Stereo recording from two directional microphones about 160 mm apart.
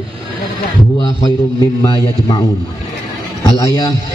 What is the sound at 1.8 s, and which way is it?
Speech, 30° left (ahead or behind).